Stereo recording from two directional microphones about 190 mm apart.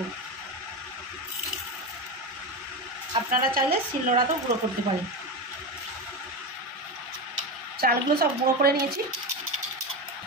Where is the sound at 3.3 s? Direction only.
45° right (ahead or behind).